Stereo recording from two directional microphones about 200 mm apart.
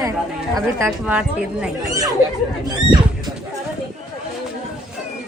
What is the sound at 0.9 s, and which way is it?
Speech, 5° right (ahead or behind).